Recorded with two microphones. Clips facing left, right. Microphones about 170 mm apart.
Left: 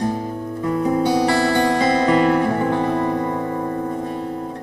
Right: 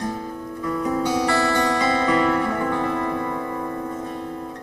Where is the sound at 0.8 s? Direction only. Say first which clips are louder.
Left 4 dB; 30° left (ahead or behind).